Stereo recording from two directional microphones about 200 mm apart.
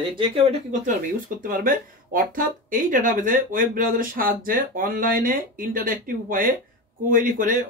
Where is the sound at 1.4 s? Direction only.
45° right (ahead or behind).